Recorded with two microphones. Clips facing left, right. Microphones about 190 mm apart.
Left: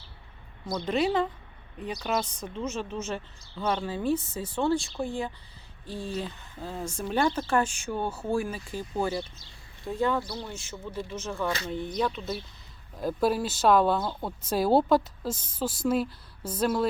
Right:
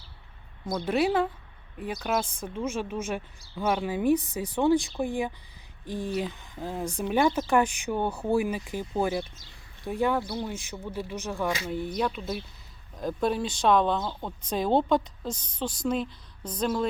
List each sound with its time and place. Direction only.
0.7 s speech: 5° right (ahead or behind)
13.0 s a woman's voice: 5° left (ahead or behind)